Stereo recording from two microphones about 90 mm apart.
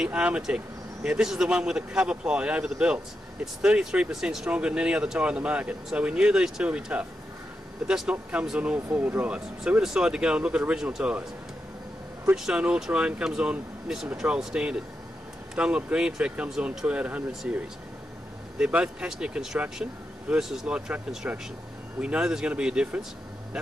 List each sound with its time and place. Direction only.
0.0 s speech: 15° right (ahead or behind)
12.4 s speech: 10° right (ahead or behind)